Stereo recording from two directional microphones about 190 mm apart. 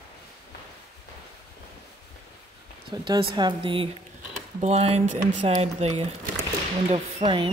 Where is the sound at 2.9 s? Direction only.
20° right (ahead or behind).